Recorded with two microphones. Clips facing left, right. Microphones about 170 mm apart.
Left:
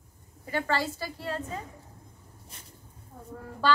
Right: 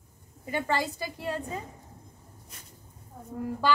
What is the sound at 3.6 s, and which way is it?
Speech, 15° right (ahead or behind).